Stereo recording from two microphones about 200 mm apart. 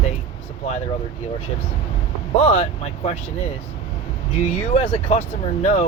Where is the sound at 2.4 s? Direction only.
35° left (ahead or behind).